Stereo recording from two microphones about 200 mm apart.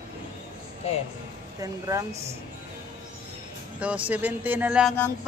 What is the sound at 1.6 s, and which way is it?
Speech, 15° right (ahead or behind).